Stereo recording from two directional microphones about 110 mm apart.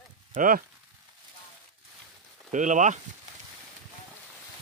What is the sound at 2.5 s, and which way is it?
Speech, 90° right.